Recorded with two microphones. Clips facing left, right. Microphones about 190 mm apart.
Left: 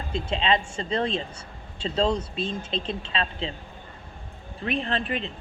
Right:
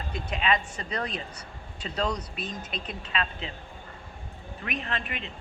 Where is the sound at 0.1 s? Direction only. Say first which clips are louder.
Left 3 dB; 25° left (ahead or behind).